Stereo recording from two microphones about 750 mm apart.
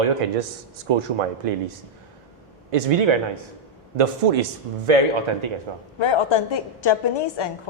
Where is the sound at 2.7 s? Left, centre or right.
Right.